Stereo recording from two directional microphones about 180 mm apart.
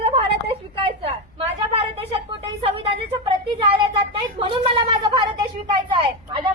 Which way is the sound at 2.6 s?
35° right (ahead or behind).